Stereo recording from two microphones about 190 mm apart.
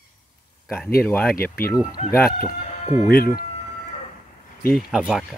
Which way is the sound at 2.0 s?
35° left (ahead or behind).